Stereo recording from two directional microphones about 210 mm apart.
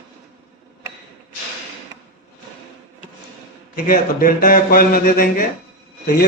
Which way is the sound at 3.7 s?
40° left (ahead or behind).